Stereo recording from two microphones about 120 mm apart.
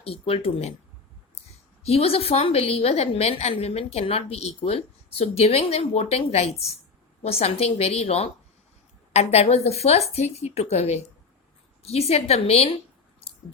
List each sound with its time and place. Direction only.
0.0 s speech: 55° left (ahead or behind)
1.8 s a woman's voice: 60° left (ahead or behind)